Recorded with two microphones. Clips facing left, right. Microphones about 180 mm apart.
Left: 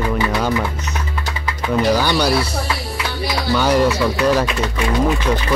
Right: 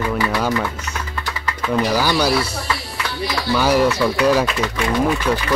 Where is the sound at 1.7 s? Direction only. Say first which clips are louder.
Left 2 dB; 10° right (ahead or behind).